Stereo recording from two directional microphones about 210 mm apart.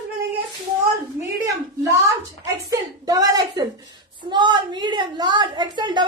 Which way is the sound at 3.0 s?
15° right (ahead or behind).